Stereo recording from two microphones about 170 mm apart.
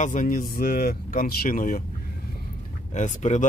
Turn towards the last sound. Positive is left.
turn(degrees=45)  # may be behind; listen again after turning